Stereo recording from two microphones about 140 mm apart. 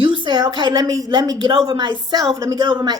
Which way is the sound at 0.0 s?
35° right (ahead or behind).